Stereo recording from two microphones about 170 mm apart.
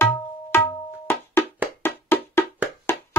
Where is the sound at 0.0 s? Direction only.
15° left (ahead or behind).